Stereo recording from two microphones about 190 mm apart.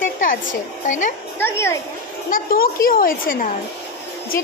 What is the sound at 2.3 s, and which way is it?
A woman's voice, 50° left (ahead or behind).